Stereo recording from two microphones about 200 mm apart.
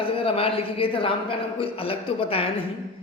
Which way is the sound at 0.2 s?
25° left (ahead or behind).